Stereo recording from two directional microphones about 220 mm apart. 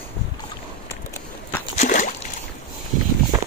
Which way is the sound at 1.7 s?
35° left (ahead or behind).